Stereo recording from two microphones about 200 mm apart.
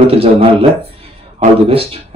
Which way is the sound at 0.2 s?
25° right (ahead or behind).